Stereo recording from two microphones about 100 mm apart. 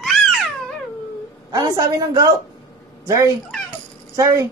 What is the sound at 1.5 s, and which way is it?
Speech, 40° right (ahead or behind).